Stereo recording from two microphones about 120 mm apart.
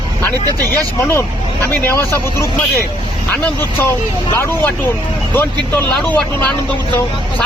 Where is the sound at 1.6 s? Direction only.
20° left (ahead or behind).